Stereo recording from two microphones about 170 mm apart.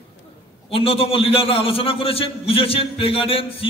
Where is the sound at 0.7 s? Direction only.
35° left (ahead or behind).